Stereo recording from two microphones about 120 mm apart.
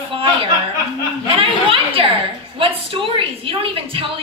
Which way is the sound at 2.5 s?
50° right (ahead or behind).